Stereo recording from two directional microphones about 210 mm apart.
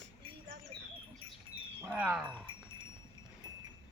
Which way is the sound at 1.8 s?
5° right (ahead or behind).